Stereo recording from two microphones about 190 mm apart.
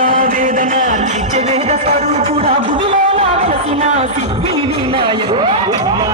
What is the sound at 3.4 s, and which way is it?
Speech, 35° right (ahead or behind).